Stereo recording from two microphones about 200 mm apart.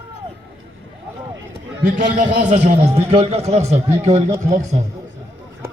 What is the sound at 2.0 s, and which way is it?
A man's voice, 40° right (ahead or behind).